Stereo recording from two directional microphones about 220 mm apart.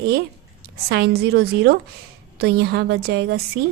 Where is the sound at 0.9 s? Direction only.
45° right (ahead or behind).